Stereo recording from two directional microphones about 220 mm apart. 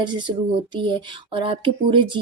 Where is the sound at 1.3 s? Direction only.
25° right (ahead or behind).